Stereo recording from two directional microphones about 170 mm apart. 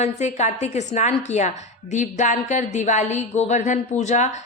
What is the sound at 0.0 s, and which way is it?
A woman's voice, 40° left (ahead or behind).